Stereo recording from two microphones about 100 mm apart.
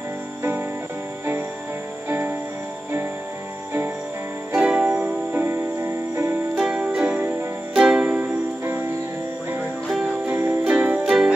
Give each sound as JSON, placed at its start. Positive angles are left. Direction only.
{"t": 0.4, "sound": "music", "side_deg": -20}
{"t": 2.0, "sound": "music", "side_deg": -20}
{"t": 4.5, "sound": "music", "side_deg": -10}
{"t": 6.5, "sound": "music", "side_deg": -10}
{"t": 7.7, "sound": "music", "side_deg": -5}
{"t": 8.0, "sound": "music", "side_deg": -15}
{"t": 10.2, "sound": "music", "side_deg": -20}